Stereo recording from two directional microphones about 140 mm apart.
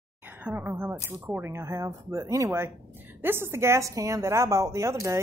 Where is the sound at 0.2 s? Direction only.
10° right (ahead or behind).